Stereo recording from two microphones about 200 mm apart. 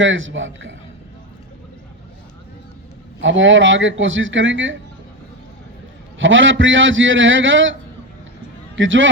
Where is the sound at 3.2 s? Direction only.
70° right (ahead or behind).